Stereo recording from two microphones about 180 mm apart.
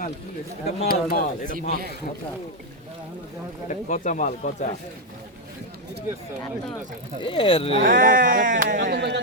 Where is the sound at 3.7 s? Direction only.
45° left (ahead or behind).